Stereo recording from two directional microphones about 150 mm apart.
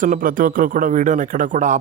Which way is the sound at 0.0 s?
65° right (ahead or behind).